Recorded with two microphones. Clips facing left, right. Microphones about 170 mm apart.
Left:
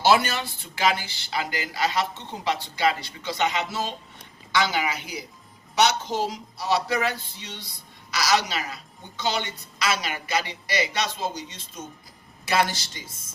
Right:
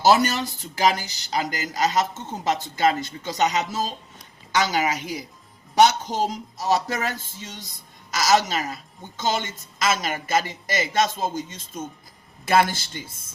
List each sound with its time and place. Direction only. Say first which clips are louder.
0.0 s speech: right 2 dB; 40° right (ahead or behind)